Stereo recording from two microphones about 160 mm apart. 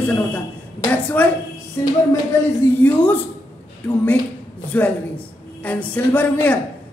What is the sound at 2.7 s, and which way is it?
Speech, 10° left (ahead or behind).